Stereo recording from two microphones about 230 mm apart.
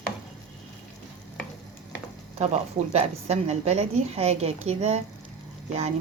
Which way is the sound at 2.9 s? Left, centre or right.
Right.